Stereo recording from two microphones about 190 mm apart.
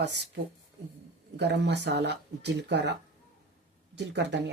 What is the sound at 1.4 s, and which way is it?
Speech, 65° right (ahead or behind).